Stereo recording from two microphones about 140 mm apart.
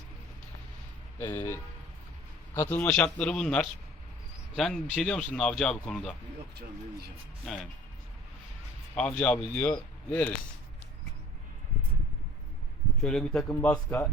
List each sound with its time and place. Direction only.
1.2 s speech: 20° left (ahead or behind)
2.6 s speech: 15° left (ahead or behind)
7.4 s speech: 5° left (ahead or behind)
9.0 s speech: 10° left (ahead or behind)
13.0 s speech: 5° left (ahead or behind)